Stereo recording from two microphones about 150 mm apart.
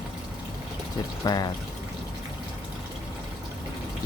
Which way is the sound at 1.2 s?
25° left (ahead or behind).